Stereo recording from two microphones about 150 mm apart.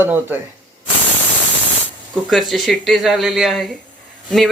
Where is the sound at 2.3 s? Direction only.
Centre (ahead or behind).